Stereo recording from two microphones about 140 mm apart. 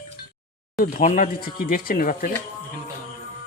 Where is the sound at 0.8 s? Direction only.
75° left (ahead or behind).